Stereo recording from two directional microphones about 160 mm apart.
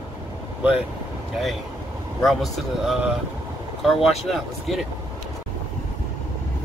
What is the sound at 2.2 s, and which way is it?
Speech, centre (ahead or behind).